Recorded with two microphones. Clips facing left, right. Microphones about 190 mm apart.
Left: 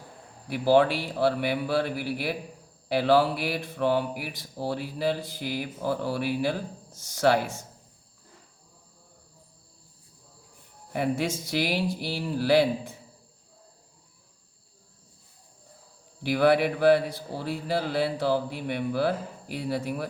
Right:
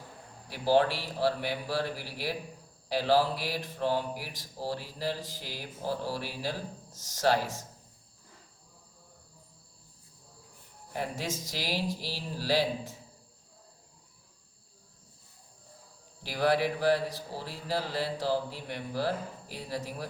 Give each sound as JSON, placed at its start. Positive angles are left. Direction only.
{"t": 0.4, "sound": "speech", "side_deg": 65}
{"t": 10.9, "sound": "speech", "side_deg": 65}
{"t": 16.2, "sound": "speech", "side_deg": 65}